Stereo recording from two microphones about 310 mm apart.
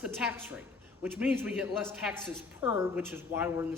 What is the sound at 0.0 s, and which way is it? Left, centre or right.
A man's voice, centre.